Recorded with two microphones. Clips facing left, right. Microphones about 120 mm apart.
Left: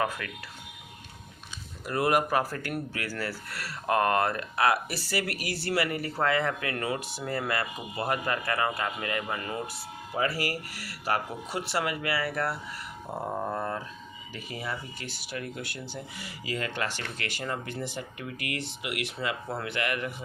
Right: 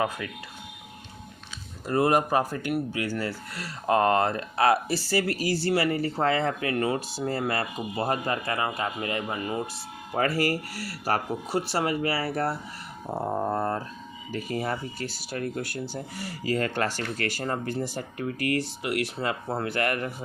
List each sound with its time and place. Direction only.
1.9 s speech: 25° right (ahead or behind)
10.2 s speech: 45° right (ahead or behind)
14.3 s speech: 45° right (ahead or behind)